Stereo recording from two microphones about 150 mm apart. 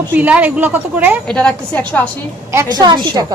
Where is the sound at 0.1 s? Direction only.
10° right (ahead or behind).